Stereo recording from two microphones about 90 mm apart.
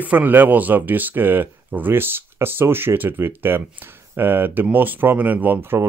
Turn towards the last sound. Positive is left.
turn(degrees=-20)  # may be behind; listen again after turning